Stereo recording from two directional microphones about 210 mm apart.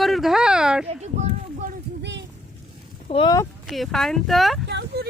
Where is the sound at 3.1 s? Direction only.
25° left (ahead or behind).